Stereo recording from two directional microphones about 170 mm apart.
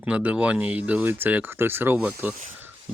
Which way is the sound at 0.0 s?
10° right (ahead or behind).